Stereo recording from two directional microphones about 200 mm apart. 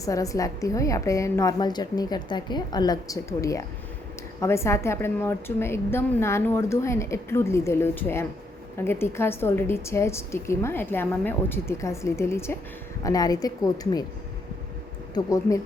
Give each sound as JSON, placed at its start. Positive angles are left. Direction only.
{"t": 0.0, "sound": "a woman's voice", "side_deg": 15}
{"t": 15.1, "sound": "a woman's voice", "side_deg": 15}